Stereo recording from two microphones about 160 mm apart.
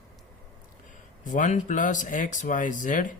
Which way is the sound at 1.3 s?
50° left (ahead or behind).